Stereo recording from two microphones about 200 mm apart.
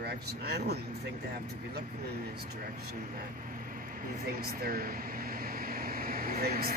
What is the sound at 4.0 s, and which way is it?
Air conditioning, 45° right (ahead or behind).